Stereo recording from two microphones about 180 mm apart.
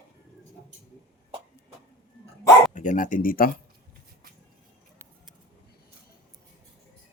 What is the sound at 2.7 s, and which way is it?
Speech, 45° left (ahead or behind).